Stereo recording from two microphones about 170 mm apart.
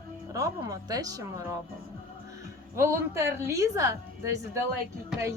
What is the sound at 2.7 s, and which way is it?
A woman's voice, 15° right (ahead or behind).